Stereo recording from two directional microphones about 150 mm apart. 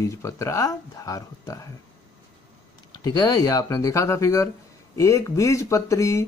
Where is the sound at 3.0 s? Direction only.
25° left (ahead or behind).